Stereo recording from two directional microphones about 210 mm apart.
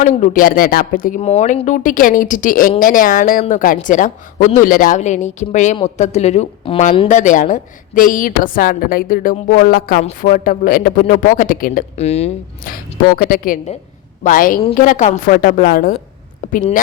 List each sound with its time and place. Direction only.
0.0 s speech: 35° left (ahead or behind)
12.7 s speech: 45° left (ahead or behind)